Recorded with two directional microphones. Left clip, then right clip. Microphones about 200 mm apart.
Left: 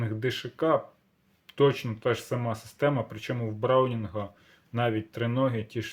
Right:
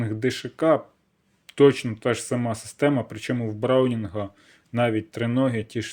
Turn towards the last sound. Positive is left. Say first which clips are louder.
# right 4 dB
turn(degrees=-30)  # may be behind; listen again after turning